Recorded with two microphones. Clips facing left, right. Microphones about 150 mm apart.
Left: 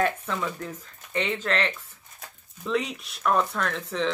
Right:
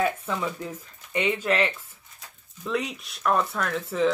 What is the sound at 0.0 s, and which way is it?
Speech, 10° right (ahead or behind).